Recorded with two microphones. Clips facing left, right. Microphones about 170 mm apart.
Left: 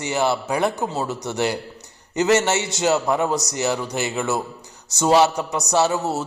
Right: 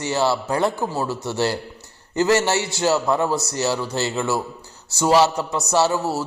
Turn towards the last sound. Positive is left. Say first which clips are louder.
# even
turn(degrees=20)  # may be behind; listen again after turning